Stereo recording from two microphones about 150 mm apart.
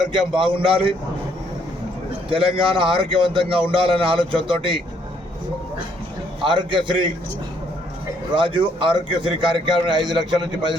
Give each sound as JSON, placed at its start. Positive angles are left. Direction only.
{"t": 0.1, "sound": "a man's voice", "side_deg": -35}
{"t": 2.3, "sound": "a man's voice", "side_deg": -35}
{"t": 6.4, "sound": "a man's voice", "side_deg": -30}
{"t": 8.4, "sound": "a man's voice", "side_deg": -35}